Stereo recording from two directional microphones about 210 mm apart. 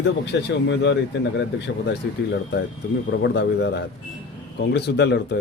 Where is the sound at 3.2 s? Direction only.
55° left (ahead or behind).